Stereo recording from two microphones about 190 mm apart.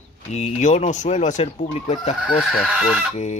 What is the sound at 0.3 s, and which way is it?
Speech, 40° left (ahead or behind).